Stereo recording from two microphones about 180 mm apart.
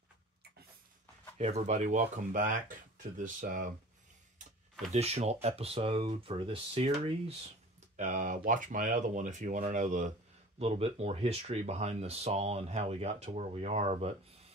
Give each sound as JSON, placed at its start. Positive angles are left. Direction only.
{"t": 1.4, "sound": "speech", "side_deg": -40}
{"t": 4.9, "sound": "speech", "side_deg": -35}
{"t": 7.9, "sound": "speech", "side_deg": -45}